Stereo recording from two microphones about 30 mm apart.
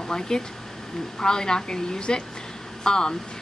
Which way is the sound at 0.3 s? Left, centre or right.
Left.